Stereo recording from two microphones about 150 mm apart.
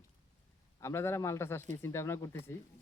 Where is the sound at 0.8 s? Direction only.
15° left (ahead or behind).